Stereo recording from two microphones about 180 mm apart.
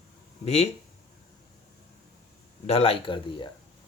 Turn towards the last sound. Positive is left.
turn(degrees=30)  # may be behind; listen again after turning